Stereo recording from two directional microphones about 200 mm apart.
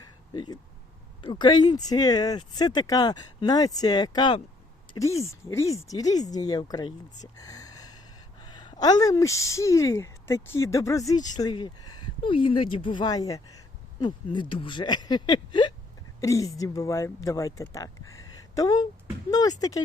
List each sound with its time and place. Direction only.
0.3 s speech: 20° left (ahead or behind)
7.3 s gasp: 20° left (ahead or behind)
8.4 s speech: 20° left (ahead or behind)